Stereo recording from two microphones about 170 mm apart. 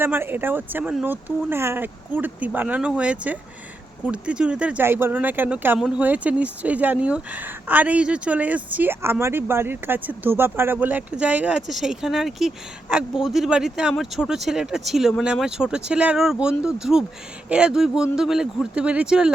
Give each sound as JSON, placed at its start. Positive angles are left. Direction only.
{"t": 0.0, "sound": "a woman's voice", "side_deg": -10}